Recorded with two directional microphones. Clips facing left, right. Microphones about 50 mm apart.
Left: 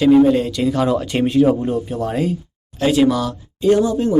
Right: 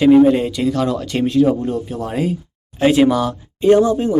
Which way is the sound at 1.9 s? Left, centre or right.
Centre.